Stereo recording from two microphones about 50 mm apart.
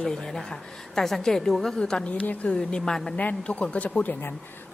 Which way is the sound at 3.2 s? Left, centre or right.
Left.